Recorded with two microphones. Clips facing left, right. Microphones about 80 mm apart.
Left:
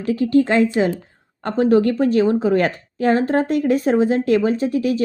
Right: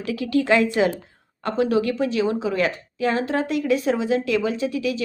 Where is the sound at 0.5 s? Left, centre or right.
Right.